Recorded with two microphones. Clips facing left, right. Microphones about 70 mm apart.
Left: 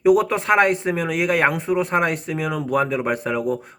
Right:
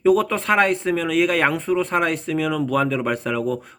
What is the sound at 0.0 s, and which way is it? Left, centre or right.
Speech, centre.